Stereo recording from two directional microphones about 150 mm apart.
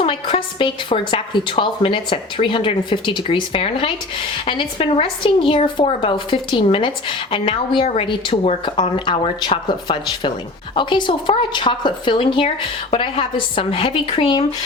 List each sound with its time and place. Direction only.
0.0 s a woman's voice: 35° left (ahead or behind)